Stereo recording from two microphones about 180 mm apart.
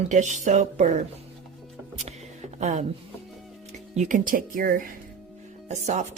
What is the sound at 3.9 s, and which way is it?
Speech, 45° right (ahead or behind).